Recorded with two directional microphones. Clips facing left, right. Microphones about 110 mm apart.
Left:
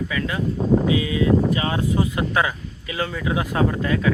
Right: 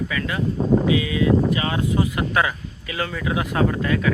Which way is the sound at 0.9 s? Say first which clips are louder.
Even; 30° left (ahead or behind).